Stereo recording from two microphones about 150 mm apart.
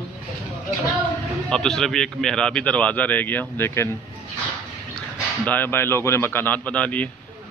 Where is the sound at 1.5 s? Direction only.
5° left (ahead or behind).